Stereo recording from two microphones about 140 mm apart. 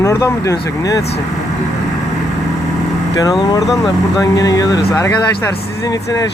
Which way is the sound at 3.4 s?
25° left (ahead or behind).